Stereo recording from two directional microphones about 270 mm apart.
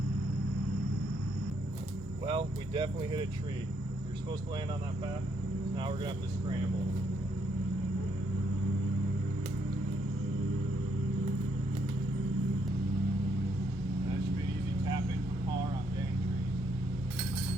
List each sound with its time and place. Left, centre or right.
2.2 s speech: centre
5.7 s speech: centre